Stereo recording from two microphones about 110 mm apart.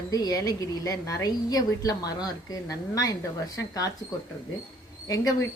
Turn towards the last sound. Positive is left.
turn(degrees=30)  # may be behind; listen again after turning